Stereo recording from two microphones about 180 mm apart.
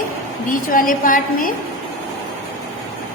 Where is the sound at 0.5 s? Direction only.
50° left (ahead or behind).